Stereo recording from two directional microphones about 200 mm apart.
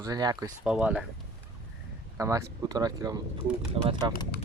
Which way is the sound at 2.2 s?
15° right (ahead or behind).